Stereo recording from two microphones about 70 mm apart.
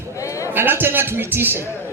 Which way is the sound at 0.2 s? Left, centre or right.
Left.